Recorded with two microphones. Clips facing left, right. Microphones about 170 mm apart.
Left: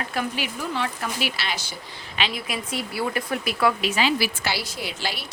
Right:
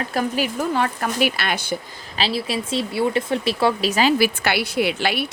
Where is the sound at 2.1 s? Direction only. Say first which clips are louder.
Right 5 dB; 35° right (ahead or behind).